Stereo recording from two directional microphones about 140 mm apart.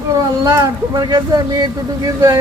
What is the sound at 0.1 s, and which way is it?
Speech, 25° right (ahead or behind).